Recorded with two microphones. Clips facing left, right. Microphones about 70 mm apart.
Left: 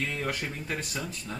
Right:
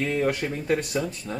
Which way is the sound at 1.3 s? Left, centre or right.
Centre.